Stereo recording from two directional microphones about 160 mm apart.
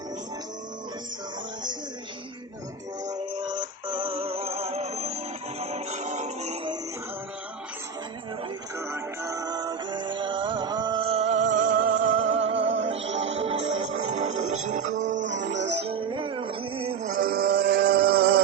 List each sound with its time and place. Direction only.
3.5 s synthetic singing: 30° right (ahead or behind)
8.9 s music: 20° right (ahead or behind)
11.2 s music: 50° right (ahead or behind)
12.1 s music: 40° right (ahead or behind)
17.1 s music: 65° right (ahead or behind)